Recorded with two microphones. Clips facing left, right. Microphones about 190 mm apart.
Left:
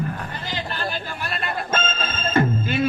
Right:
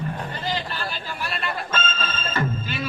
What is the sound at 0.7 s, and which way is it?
Music, 50° left (ahead or behind).